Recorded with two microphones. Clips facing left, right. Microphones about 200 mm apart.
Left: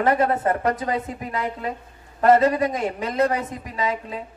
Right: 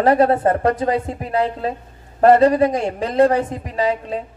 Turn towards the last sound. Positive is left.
turn(degrees=-30)  # may be behind; listen again after turning